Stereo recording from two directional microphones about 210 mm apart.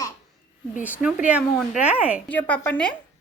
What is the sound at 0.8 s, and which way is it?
Speech, 5° right (ahead or behind).